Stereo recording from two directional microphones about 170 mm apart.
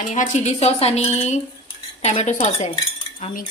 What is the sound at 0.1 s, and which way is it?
Speech, 45° left (ahead or behind).